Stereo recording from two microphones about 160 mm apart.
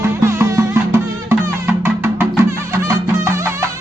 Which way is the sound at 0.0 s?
15° right (ahead or behind).